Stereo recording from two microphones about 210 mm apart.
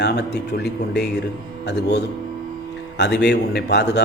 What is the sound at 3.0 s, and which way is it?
A man's voice, 55° left (ahead or behind).